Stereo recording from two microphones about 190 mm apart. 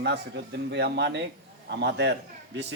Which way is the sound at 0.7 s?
65° right (ahead or behind).